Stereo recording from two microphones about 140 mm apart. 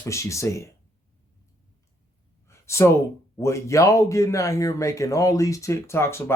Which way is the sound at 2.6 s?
20° left (ahead or behind).